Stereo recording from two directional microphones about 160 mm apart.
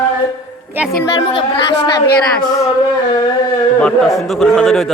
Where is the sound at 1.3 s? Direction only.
35° left (ahead or behind).